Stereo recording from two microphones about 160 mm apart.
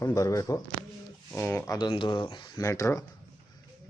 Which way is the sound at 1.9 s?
30° left (ahead or behind).